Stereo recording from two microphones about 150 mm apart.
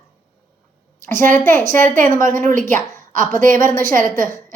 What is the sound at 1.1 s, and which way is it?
A woman's voice, 60° right (ahead or behind).